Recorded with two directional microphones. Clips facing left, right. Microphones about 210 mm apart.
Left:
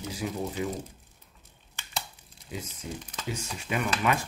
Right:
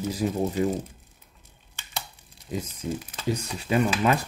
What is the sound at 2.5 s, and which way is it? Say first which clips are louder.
Speech: right 7 dB; 45° right (ahead or behind).